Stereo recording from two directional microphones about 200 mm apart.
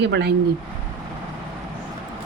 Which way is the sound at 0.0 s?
60° right (ahead or behind).